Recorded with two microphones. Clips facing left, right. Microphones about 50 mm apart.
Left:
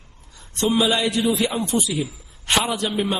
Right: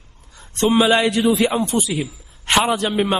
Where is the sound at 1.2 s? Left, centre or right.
Right.